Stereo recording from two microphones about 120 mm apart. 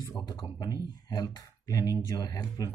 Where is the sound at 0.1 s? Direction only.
35° left (ahead or behind).